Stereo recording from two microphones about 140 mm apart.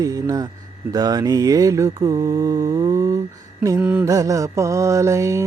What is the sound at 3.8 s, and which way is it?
Mantra, 10° right (ahead or behind).